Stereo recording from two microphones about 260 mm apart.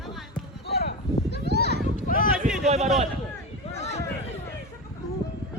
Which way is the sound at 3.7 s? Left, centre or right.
Left.